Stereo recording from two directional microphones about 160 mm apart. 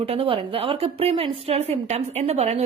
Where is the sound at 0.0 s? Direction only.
35° right (ahead or behind).